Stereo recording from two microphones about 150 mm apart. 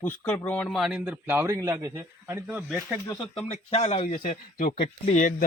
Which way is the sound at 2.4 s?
Centre (ahead or behind).